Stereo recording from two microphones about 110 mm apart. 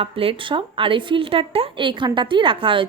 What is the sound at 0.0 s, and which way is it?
A woman's voice, 55° right (ahead or behind).